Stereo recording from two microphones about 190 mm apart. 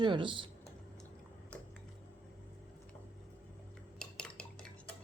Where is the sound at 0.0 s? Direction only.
25° right (ahead or behind).